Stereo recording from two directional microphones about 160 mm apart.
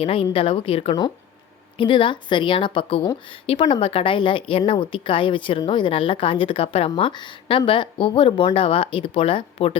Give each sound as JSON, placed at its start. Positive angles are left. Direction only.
{"t": 0.0, "sound": "a woman's voice", "side_deg": 35}